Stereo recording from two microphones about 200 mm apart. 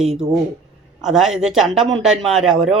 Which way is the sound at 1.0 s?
Centre (ahead or behind).